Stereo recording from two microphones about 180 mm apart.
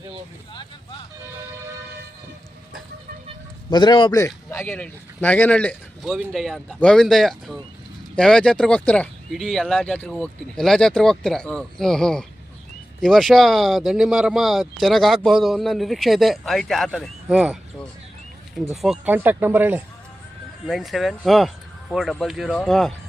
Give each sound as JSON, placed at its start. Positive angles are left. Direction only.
{"t": 0.5, "sound": "speech", "side_deg": 25}
{"t": 3.7, "sound": "speech", "side_deg": 25}
{"t": 4.5, "sound": "speech", "side_deg": 10}
{"t": 18.7, "sound": "speech", "side_deg": 0}